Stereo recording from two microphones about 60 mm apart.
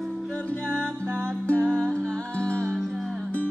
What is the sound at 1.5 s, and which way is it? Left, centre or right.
Music, centre.